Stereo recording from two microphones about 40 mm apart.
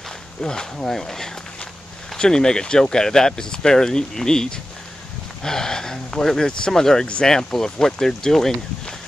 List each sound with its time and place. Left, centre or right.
0.4 s speech: left